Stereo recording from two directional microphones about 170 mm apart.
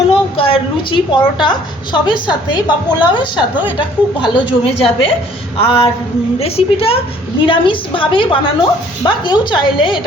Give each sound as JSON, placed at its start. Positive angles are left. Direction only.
{"t": 0.1, "sound": "a woman's voice", "side_deg": 30}